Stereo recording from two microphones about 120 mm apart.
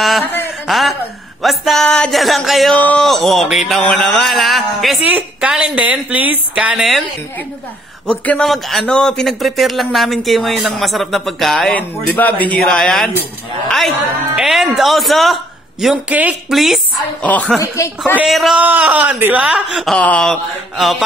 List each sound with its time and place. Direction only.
0.2 s a sound: 15° left (ahead or behind)
0.7 s a sound: centre (ahead or behind)
1.4 s speech: centre (ahead or behind)
2.8 s a man's voice: 10° left (ahead or behind)
3.1 s a woman's voice: centre (ahead or behind)
8.1 s a man's voice: 10° left (ahead or behind)
8.5 s a man's voice: centre (ahead or behind)
16.5 s speech: centre (ahead or behind)
17.2 s a man's voice: 10° left (ahead or behind)
17.6 s speech: 25° left (ahead or behind)
18.2 s speech: centre (ahead or behind)
18.6 s a woman's voice: 15° right (ahead or behind)
20.0 s speech: 10° left (ahead or behind)